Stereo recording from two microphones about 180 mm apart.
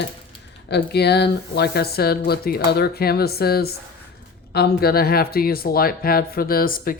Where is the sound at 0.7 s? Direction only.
65° left (ahead or behind).